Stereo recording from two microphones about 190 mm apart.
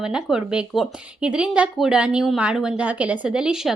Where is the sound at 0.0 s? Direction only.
5° right (ahead or behind).